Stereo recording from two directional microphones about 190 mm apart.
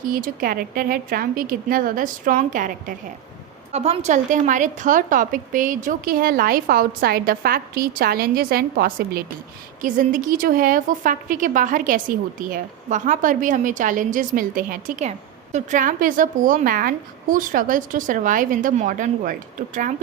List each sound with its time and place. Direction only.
0.0 s a woman's voice: 50° right (ahead or behind)
3.7 s a woman's voice: 35° right (ahead or behind)